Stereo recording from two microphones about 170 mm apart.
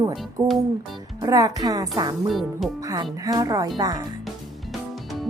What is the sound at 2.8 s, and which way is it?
Music, 20° right (ahead or behind).